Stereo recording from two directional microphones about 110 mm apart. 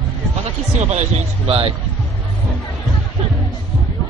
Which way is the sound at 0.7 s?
90° right.